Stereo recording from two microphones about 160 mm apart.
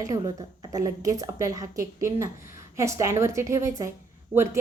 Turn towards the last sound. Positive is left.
turn(degrees=-10)  # may be behind; listen again after turning